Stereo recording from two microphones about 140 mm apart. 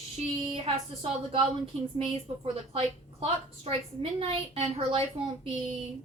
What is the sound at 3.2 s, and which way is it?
A woman's voice, 40° right (ahead or behind).